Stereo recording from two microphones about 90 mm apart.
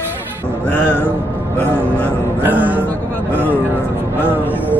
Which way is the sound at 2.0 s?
20° right (ahead or behind).